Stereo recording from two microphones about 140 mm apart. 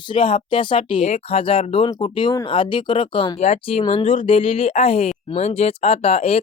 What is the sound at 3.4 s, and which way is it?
Speech, 50° left (ahead or behind).